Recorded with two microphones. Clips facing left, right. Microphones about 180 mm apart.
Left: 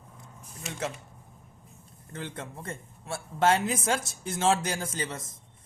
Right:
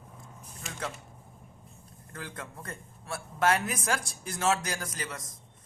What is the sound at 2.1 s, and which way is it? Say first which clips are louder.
Speech: left 4 dB; 25° left (ahead or behind).